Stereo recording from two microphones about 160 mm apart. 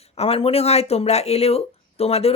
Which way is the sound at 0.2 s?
40° left (ahead or behind).